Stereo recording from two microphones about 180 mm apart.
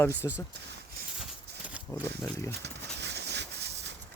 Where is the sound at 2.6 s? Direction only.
70° right (ahead or behind).